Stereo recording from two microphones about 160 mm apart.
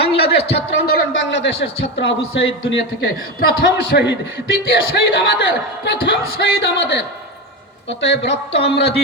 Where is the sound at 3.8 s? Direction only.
90° left.